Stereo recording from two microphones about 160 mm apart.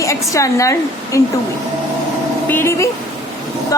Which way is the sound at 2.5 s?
15° left (ahead or behind).